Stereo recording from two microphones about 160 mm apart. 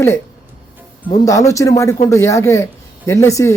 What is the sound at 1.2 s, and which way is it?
Speech, 20° left (ahead or behind).